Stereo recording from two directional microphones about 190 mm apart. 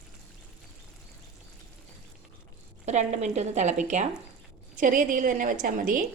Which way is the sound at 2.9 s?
40° right (ahead or behind).